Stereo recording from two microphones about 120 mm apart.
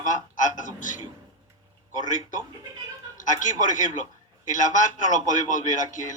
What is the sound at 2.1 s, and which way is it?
A man's voice, 90° left.